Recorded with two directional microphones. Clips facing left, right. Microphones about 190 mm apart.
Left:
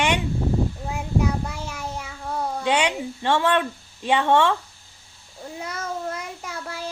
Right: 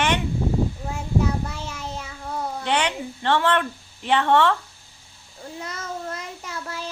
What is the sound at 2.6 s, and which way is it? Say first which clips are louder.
Speech: left 2 dB; 10° left (ahead or behind).